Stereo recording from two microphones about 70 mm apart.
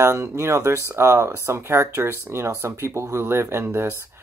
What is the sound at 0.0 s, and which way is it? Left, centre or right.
Speech, right.